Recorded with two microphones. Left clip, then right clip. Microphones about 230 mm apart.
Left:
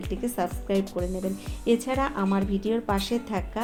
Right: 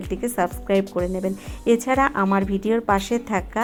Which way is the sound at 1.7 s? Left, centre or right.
Right.